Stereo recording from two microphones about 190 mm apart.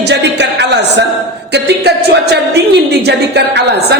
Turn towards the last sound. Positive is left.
turn(degrees=-60)  # may be behind; listen again after turning